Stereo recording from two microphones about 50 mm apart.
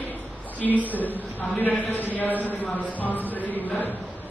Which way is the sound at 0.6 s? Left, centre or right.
Centre.